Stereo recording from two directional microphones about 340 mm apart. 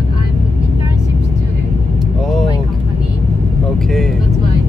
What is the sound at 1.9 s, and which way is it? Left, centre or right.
Vehicle, centre.